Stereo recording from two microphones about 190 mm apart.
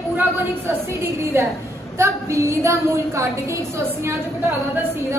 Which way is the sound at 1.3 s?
10° right (ahead or behind).